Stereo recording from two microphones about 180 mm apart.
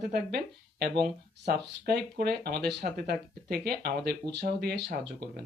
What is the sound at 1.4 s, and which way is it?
Speech, 60° right (ahead or behind).